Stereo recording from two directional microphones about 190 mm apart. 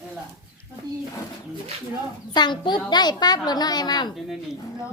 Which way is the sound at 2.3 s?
25° left (ahead or behind).